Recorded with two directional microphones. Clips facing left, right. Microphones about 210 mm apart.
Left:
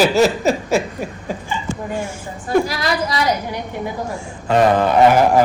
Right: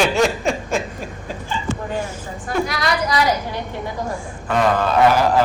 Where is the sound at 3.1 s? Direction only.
25° left (ahead or behind).